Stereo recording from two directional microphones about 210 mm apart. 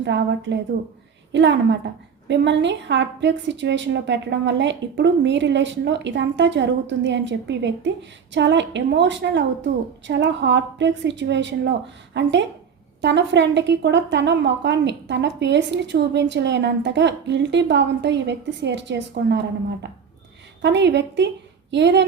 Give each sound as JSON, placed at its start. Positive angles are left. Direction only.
{"t": 0.0, "sound": "a woman's voice", "side_deg": -55}